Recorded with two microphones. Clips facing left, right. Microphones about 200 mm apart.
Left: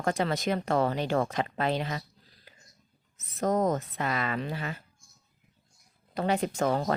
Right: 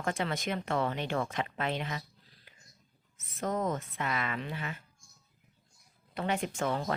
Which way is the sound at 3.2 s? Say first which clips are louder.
Left 6 dB; 40° left (ahead or behind).